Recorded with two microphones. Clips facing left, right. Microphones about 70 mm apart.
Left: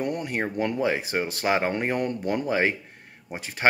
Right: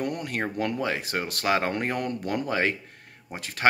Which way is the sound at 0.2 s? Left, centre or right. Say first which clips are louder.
Left 2 dB; centre.